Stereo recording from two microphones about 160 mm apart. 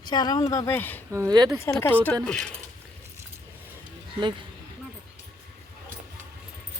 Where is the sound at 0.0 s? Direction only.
25° left (ahead or behind).